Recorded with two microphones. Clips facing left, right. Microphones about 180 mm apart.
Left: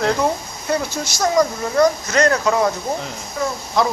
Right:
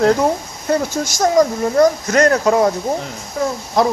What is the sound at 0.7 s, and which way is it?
Speech, 45° right (ahead or behind).